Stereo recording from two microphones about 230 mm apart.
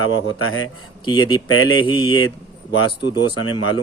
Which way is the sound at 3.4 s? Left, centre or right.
Left.